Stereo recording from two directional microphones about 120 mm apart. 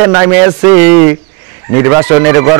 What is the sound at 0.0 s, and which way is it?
A man's voice, 20° right (ahead or behind).